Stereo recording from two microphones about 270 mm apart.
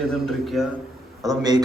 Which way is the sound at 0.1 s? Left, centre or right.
Centre.